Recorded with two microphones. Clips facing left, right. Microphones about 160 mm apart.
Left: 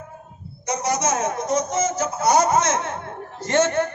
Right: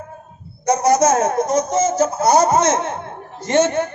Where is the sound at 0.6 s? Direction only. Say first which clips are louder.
Right 9 dB; 45° right (ahead or behind).